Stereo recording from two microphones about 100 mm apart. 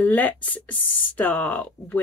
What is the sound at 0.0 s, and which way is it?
Speech, 15° left (ahead or behind).